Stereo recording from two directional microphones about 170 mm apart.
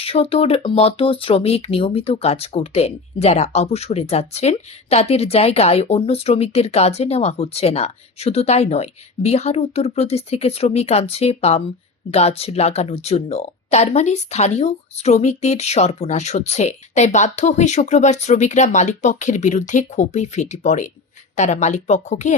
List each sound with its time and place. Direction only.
0.0 s speech: 35° left (ahead or behind)